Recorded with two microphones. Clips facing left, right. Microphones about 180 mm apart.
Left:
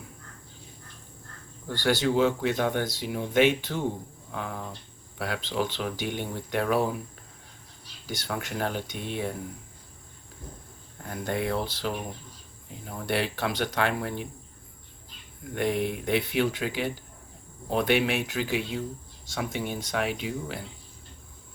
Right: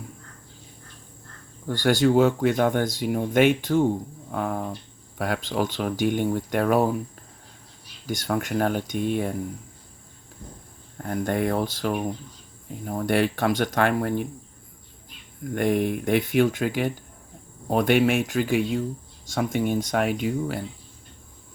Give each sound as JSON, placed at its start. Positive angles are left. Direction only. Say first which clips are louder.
{"t": 1.6, "sound": "speech", "louder": "right 5 dB", "side_deg": -45}
{"t": 8.0, "sound": "speech", "louder": "right 7 dB", "side_deg": -50}
{"t": 10.9, "sound": "speech", "louder": "right 5 dB", "side_deg": -45}
{"t": 15.5, "sound": "speech", "louder": "right 4 dB", "side_deg": -45}